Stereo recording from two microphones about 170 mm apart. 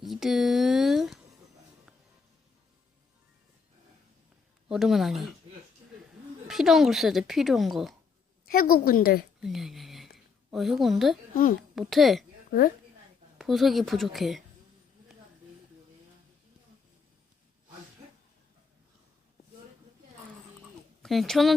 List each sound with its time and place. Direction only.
0.0 s a sound: centre (ahead or behind)
4.7 s speech: centre (ahead or behind)
6.5 s speech: centre (ahead or behind)
8.4 s a woman's voice: 60° left (ahead or behind)
9.4 s speech: centre (ahead or behind)
12.5 s speech: 60° left (ahead or behind)
13.4 s speech: centre (ahead or behind)
21.0 s speech: centre (ahead or behind)